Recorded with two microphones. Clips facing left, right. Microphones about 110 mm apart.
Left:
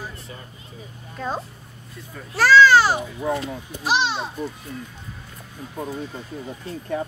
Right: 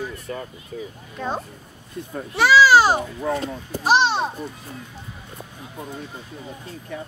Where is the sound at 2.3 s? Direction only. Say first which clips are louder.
Even; 5° right (ahead or behind).